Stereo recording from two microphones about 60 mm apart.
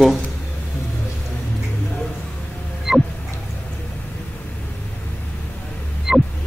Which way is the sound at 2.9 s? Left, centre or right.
Centre.